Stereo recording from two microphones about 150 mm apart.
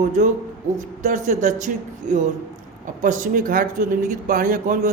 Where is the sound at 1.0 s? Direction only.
55° right (ahead or behind).